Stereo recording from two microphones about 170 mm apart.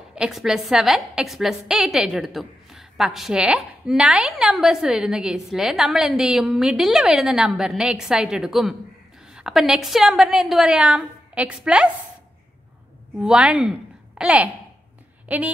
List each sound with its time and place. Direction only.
0.1 s a woman's voice: 5° right (ahead or behind)
13.2 s speech: 5° right (ahead or behind)